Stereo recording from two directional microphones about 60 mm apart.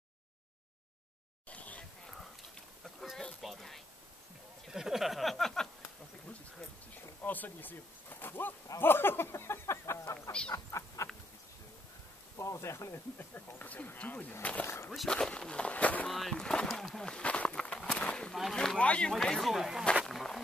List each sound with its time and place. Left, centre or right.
1.5 s a sound: left
2.8 s a sound: centre
4.6 s speech: centre
7.2 s speech: left
8.7 s a sound: left
10.5 s frog: left
12.4 s speech: left
13.3 s speech: left
14.9 s speech: centre; by 16.1 s left
16.1 s speech: centre
18.3 s speech: centre
18.8 s speech: centre
19.2 s speech: centre
20.1 s a sound: centre